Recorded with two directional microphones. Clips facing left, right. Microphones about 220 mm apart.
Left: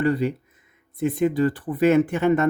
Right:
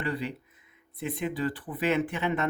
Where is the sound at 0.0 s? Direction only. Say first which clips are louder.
Left 10 dB; 45° left (ahead or behind).